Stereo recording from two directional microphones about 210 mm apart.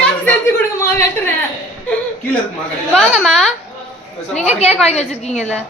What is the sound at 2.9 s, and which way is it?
Speech, centre (ahead or behind).